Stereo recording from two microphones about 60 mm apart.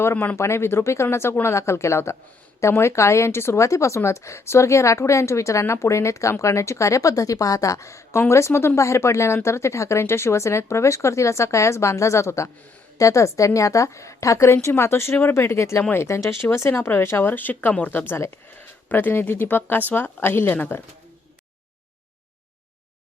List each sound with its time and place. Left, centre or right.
0.0 s speech: left
0.3 s speech: left